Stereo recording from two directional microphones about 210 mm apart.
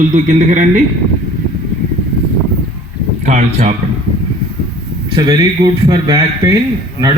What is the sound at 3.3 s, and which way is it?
Speech, 35° right (ahead or behind).